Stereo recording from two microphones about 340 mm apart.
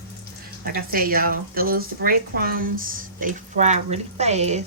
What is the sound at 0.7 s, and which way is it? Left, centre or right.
Speech, right.